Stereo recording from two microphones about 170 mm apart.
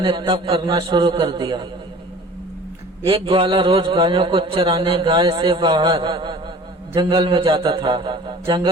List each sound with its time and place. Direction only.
0.0 s a man's voice: 30° right (ahead or behind)
3.1 s a man's voice: 30° right (ahead or behind)